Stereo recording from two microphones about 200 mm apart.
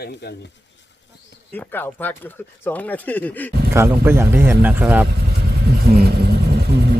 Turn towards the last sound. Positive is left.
turn(degrees=-55)  # may be behind; listen again after turning